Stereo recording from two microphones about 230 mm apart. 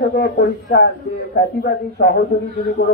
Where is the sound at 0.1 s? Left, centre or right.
Left.